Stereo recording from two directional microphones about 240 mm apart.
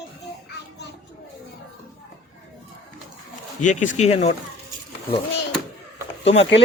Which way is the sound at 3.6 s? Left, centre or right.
Left.